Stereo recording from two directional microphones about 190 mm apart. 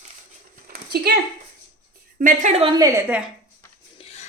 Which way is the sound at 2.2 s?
40° right (ahead or behind).